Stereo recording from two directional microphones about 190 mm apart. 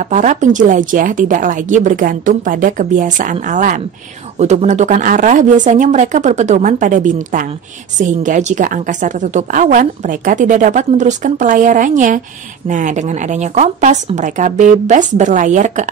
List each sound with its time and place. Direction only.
0.0 s a woman's voice: 40° right (ahead or behind)